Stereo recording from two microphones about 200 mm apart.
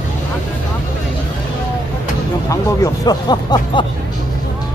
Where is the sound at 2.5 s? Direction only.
20° left (ahead or behind).